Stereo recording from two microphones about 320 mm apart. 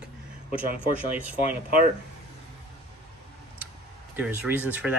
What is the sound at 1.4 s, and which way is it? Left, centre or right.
Speech, left.